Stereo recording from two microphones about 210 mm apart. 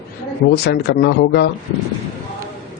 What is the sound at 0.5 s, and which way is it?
Speech, 50° left (ahead or behind).